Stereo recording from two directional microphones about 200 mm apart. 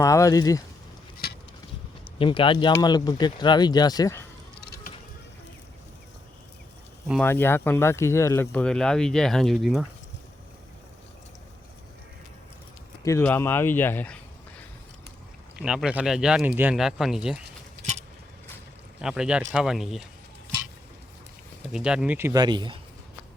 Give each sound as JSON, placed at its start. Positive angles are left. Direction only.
{"t": 0.0, "sound": "speech", "side_deg": 15}
{"t": 1.2, "sound": "a sound", "side_deg": 50}
{"t": 2.1, "sound": "speech", "side_deg": 25}
{"t": 7.2, "sound": "speech", "side_deg": 10}
{"t": 13.1, "sound": "speech", "side_deg": 10}
{"t": 15.5, "sound": "speech", "side_deg": -5}
{"t": 19.0, "sound": "speech", "side_deg": -5}
{"t": 21.7, "sound": "speech", "side_deg": -5}